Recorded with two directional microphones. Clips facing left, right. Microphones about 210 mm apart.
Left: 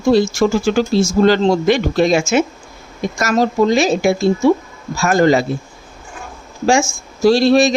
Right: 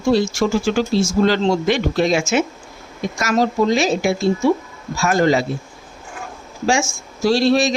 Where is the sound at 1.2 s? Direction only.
45° left (ahead or behind).